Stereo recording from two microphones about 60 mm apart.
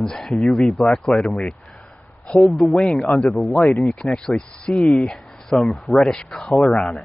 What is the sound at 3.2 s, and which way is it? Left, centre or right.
Speech, left.